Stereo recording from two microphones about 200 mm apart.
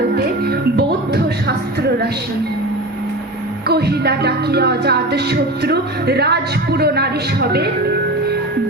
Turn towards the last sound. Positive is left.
turn(degrees=-55)  # may be behind; listen again after turning